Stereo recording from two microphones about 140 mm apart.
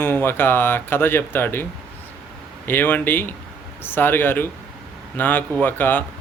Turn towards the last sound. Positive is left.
turn(degrees=15)  # may be behind; listen again after turning